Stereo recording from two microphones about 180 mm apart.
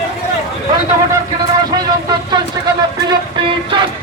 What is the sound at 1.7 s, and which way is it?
Vehicle, 25° right (ahead or behind).